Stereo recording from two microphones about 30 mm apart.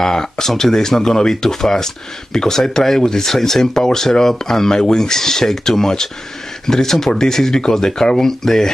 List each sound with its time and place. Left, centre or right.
0.0 s speech: centre
3.7 s speech: centre